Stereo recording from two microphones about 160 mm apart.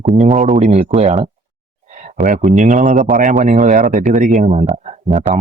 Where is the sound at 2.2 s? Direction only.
55° right (ahead or behind).